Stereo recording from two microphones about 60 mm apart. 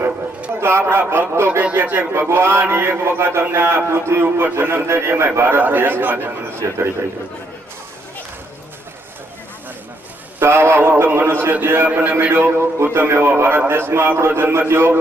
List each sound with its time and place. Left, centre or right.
0.6 s a man's voice: right
10.4 s a man's voice: right